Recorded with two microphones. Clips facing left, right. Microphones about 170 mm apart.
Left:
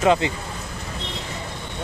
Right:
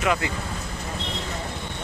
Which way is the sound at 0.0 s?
25° left (ahead or behind).